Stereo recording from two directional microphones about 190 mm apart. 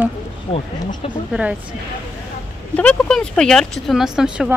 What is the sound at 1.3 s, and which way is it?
Speech, 5° right (ahead or behind).